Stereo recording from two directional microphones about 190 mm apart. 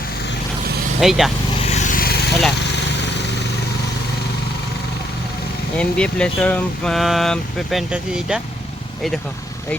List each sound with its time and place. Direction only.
1.0 s speech: centre (ahead or behind)
1.6 s vehicle: 40° left (ahead or behind)
5.7 s speech: 5° left (ahead or behind)